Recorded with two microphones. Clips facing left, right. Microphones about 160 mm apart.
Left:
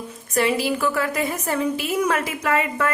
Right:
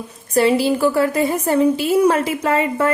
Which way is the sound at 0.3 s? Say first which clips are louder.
Right 6 dB; 30° right (ahead or behind).